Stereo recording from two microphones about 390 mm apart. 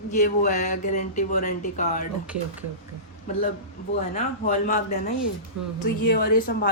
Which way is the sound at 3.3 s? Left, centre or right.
Centre.